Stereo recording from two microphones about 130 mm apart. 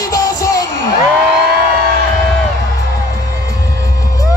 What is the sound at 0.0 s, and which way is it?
Music, 30° left (ahead or behind).